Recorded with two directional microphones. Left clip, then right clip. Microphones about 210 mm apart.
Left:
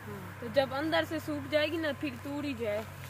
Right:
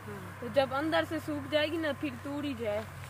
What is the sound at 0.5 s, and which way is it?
Speech, 5° left (ahead or behind).